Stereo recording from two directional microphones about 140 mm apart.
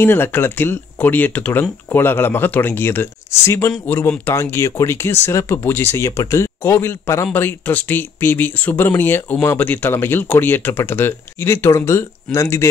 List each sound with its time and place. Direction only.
0.0 s speech: 15° left (ahead or behind)